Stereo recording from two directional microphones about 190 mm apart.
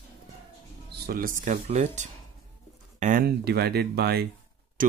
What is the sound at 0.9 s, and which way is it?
Speech, 55° right (ahead or behind).